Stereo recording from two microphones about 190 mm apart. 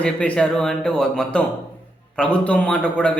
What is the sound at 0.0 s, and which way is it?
A man's voice, 5° left (ahead or behind).